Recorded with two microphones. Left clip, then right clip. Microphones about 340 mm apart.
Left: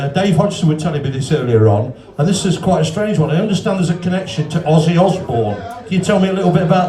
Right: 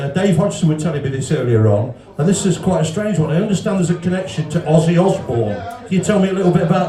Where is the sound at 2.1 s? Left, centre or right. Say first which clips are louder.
Even; centre.